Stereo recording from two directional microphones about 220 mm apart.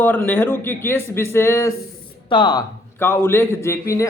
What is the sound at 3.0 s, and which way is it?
A man's voice, 10° left (ahead or behind).